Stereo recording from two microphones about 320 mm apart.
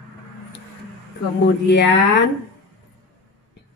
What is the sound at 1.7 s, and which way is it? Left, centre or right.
Speech, left.